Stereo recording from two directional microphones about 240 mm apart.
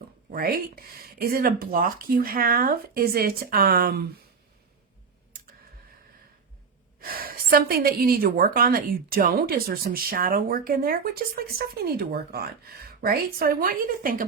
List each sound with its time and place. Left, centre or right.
0.3 s a woman's voice: right
5.3 s a sound: right
7.0 s a woman's voice: right